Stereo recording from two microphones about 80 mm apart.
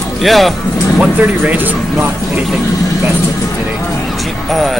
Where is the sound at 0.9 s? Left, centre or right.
Centre.